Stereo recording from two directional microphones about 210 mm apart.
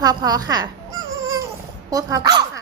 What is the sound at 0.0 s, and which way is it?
Speech, 20° right (ahead or behind).